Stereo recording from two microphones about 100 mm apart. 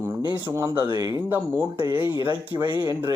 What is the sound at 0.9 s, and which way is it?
Speech, 40° right (ahead or behind).